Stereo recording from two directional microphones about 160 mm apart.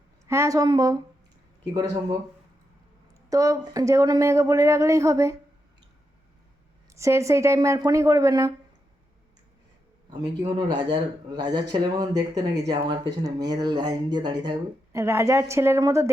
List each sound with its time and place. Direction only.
0.3 s speech: 20° right (ahead or behind)
3.2 s speech: 20° right (ahead or behind)
6.9 s speech: 20° right (ahead or behind)
10.1 s speech: 25° right (ahead or behind)
15.0 s a woman's voice: 15° right (ahead or behind)